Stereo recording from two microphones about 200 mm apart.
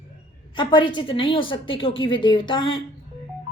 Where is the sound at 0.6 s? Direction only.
25° left (ahead or behind).